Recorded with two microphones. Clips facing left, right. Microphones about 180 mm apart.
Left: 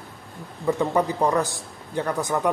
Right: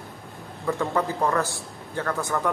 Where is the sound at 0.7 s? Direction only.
15° left (ahead or behind).